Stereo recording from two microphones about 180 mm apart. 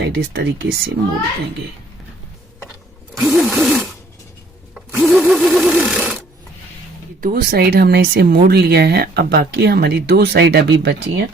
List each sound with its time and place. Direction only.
0.0 s speech: 65° right (ahead or behind)
3.2 s a sound: 5° right (ahead or behind)
7.2 s speech: 55° right (ahead or behind); by 11.2 s 75° right (ahead or behind)